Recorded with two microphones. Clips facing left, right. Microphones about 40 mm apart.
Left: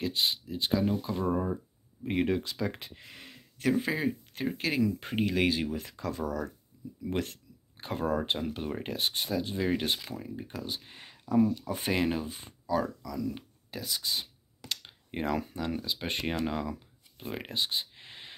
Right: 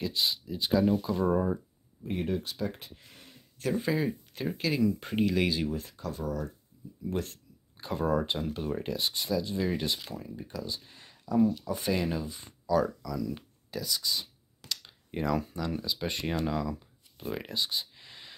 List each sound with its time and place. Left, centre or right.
0.0 s speech: left
1.2 s speech: centre
2.0 s speech: left
3.7 s speech: left
5.0 s speech: left
5.9 s speech: left
7.1 s speech: left
7.7 s a sound: left
8.0 s speech: centre
8.3 s speech: left
11.3 s speech: left
11.7 s speech: left
13.0 s speech: centre
17.2 s a sound: centre